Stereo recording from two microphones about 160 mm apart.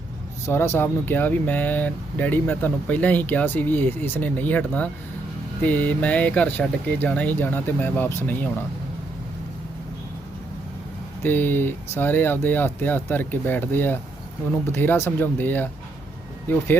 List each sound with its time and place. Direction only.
0.4 s speech: 15° left (ahead or behind)
11.2 s speech: 15° left (ahead or behind)